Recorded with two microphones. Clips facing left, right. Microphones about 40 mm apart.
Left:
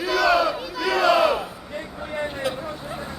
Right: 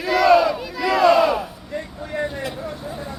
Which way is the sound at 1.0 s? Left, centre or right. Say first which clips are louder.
Right 3 dB; centre.